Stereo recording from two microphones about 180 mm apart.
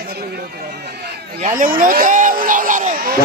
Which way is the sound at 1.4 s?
45° right (ahead or behind).